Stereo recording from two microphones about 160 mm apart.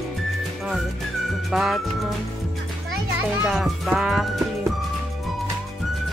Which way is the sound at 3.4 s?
Centre (ahead or behind).